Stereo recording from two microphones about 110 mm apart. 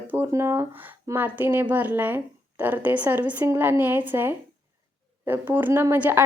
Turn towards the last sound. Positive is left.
turn(degrees=-20)  # may be behind; listen again after turning